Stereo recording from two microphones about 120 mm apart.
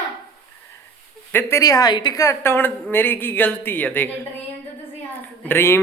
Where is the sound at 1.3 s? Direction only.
25° left (ahead or behind).